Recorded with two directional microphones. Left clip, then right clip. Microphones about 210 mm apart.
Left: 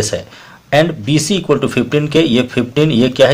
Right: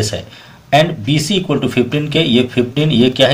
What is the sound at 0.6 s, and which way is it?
Speech, 40° left (ahead or behind).